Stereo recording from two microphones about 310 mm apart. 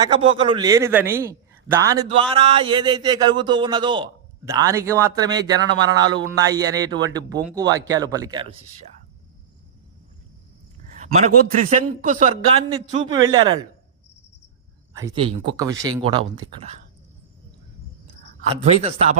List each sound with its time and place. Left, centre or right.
0.0 s a man's voice: centre
5.5 s speech: right
6.1 s a man's voice: centre
11.7 s a man's voice: right
14.9 s a man's voice: centre
18.4 s speech: right